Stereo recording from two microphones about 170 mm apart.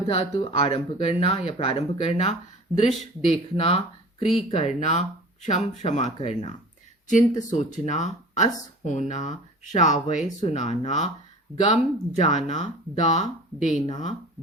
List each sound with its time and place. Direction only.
0.1 s speech: 35° left (ahead or behind)